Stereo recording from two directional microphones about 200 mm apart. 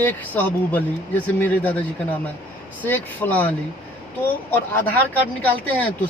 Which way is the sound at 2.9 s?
10° left (ahead or behind).